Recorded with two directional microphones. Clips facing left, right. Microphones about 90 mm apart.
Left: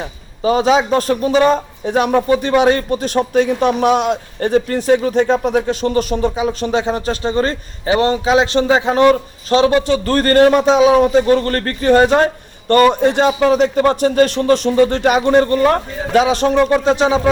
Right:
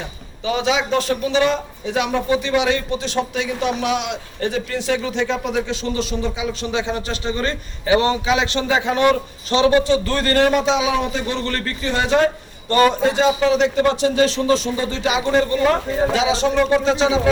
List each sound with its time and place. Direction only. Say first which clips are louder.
0.4 s a man's voice: left 7 dB; 40° left (ahead or behind)